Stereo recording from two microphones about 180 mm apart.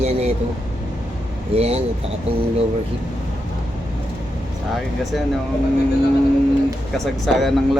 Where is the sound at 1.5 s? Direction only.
35° right (ahead or behind).